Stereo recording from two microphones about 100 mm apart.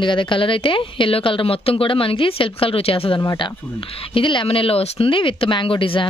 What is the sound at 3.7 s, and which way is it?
Speech, 55° left (ahead or behind).